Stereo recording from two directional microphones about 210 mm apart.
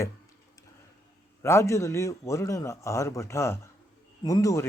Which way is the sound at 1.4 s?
10° left (ahead or behind).